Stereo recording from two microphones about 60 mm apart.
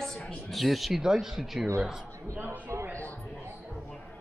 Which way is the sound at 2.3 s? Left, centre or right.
Right.